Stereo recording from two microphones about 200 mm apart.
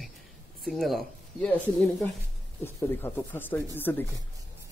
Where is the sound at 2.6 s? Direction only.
10° left (ahead or behind).